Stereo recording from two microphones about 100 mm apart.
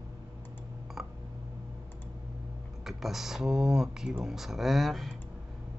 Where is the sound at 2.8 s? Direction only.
5° right (ahead or behind).